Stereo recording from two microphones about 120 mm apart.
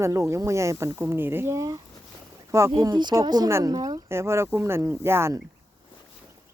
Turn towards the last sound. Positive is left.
turn(degrees=-20)  # may be behind; listen again after turning